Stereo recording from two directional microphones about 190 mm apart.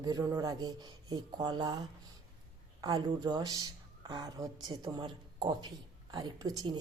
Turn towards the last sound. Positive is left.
turn(degrees=-20)  # may be behind; listen again after turning